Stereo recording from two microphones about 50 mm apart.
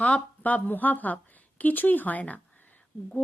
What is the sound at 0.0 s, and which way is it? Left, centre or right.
A woman's voice, left.